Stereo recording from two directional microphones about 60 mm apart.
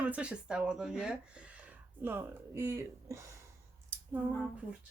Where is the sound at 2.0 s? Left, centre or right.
Right.